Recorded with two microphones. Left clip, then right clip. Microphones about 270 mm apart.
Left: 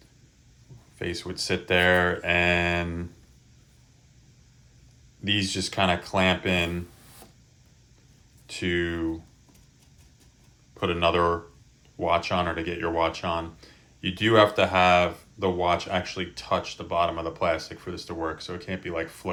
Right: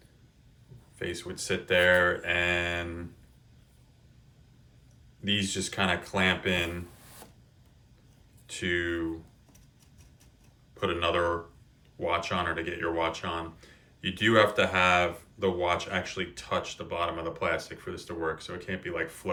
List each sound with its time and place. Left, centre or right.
0.9 s speech: centre
5.2 s speech: centre
7.2 s printer: centre
8.4 s speech: centre
10.8 s speech: centre